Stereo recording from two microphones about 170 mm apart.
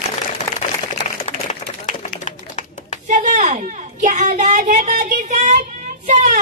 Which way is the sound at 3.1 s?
45° right (ahead or behind).